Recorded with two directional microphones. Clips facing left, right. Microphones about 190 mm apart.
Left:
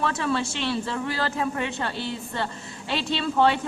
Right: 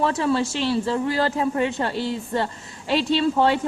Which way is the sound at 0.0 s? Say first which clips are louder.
Right 4 dB; 35° right (ahead or behind).